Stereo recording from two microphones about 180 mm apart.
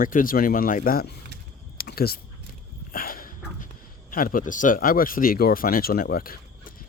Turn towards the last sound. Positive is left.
turn(degrees=55)  # may be behind; listen again after turning